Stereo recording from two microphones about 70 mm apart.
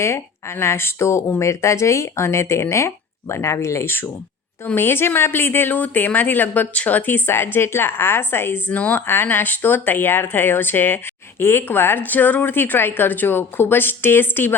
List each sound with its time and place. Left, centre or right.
0.0 s speech: left
8.7 s speech: left